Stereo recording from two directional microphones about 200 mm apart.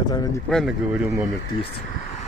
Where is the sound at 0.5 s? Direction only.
5° right (ahead or behind).